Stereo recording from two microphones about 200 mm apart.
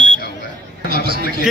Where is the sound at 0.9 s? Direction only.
50° right (ahead or behind).